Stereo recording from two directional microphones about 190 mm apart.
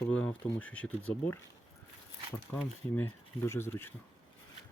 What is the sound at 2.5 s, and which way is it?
Speech, 10° left (ahead or behind).